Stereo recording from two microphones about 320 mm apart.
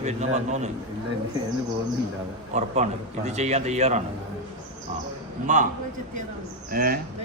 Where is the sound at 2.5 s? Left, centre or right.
Right.